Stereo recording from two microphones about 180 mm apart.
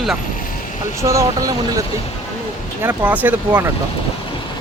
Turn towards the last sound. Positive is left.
turn(degrees=-10)  # may be behind; listen again after turning